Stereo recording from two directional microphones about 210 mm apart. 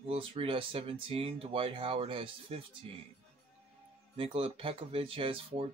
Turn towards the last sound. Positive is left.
turn(degrees=-25)  # may be behind; listen again after turning